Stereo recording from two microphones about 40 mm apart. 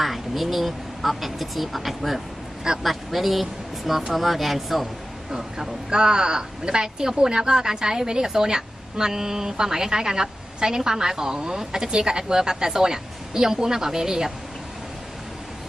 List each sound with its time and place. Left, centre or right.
0.0 s a woman's voice: centre
5.3 s speech: centre